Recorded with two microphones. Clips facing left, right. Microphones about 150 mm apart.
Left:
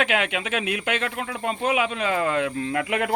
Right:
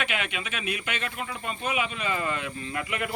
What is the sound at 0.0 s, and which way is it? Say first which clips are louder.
Speech: left 8 dB; 90° left.